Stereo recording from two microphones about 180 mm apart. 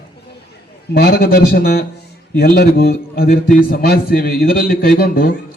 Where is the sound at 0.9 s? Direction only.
55° left (ahead or behind).